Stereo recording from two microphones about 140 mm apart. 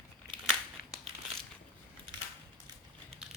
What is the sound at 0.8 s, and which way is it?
Crumpling, 90° left.